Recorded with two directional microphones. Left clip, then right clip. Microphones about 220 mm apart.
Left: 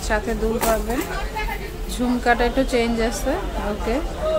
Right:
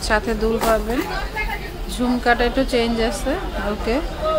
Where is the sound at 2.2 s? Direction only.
Centre (ahead or behind).